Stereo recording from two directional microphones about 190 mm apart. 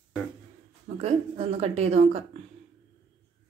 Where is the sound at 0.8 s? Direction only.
35° right (ahead or behind).